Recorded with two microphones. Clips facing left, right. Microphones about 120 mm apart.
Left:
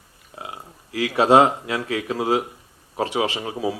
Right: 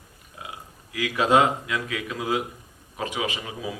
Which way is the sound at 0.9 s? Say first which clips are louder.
Left 5 dB; 35° left (ahead or behind).